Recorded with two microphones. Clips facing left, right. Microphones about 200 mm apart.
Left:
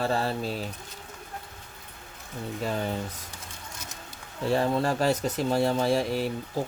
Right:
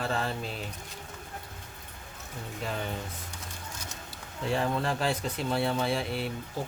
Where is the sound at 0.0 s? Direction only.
35° left (ahead or behind).